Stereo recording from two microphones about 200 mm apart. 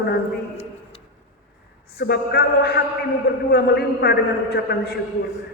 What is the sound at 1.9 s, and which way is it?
A woman's voice, 50° left (ahead or behind).